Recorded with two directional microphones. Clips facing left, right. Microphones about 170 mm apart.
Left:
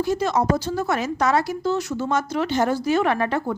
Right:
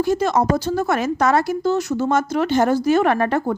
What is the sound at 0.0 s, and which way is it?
A woman's voice, 50° right (ahead or behind).